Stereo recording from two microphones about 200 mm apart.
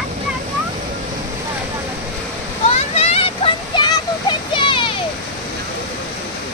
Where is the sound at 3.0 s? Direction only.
30° left (ahead or behind).